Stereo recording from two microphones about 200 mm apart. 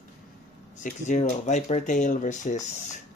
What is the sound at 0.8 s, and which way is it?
Speech, 40° left (ahead or behind).